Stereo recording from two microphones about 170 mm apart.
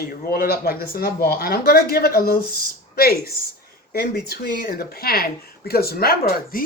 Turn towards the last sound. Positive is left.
turn(degrees=60)  # may be behind; listen again after turning